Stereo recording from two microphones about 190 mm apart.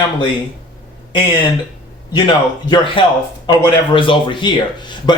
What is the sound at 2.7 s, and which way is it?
Speech, 25° left (ahead or behind).